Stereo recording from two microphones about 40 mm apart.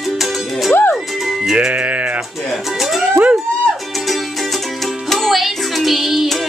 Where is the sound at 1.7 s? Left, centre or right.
Right.